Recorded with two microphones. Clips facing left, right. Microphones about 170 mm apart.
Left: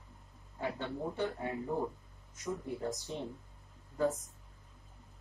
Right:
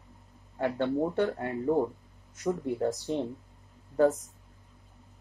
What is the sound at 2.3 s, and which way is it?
Speech, 65° right (ahead or behind).